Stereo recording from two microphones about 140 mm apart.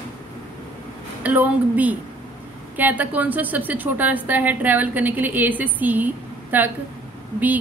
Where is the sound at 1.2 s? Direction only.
10° right (ahead or behind).